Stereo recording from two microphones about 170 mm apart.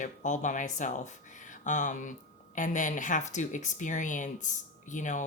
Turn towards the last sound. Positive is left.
turn(degrees=45)  # may be behind; listen again after turning